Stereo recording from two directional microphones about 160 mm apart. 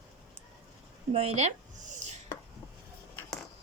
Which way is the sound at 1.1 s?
40° right (ahead or behind).